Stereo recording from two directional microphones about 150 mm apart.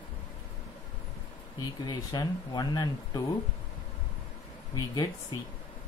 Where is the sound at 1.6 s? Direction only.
25° left (ahead or behind).